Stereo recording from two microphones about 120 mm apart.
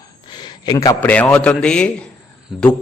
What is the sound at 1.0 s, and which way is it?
Speech, 10° left (ahead or behind).